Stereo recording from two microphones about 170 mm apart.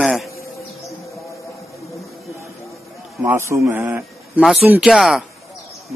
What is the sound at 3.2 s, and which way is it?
A man's voice, 15° right (ahead or behind).